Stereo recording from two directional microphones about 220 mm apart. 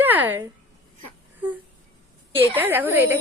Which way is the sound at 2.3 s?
10° right (ahead or behind).